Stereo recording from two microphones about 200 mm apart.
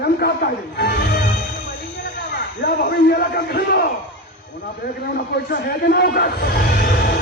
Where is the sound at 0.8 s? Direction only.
55° left (ahead or behind).